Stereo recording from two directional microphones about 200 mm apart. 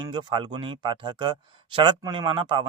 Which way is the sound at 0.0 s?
20° right (ahead or behind).